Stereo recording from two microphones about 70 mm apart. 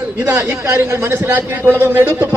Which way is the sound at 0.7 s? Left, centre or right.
Right.